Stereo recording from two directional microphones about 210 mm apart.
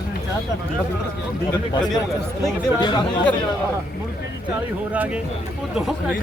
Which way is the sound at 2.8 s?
20° left (ahead or behind).